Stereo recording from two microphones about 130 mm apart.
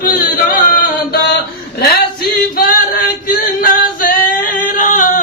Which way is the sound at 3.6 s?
90° left.